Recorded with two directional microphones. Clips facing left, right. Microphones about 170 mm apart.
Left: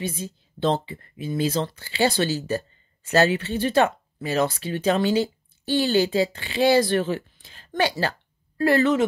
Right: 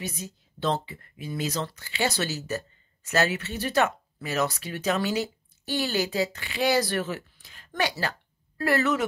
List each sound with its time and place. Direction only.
0.0 s speech: 30° left (ahead or behind)